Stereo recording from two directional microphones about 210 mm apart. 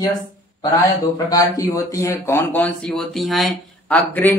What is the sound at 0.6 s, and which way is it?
A man's voice, 20° left (ahead or behind).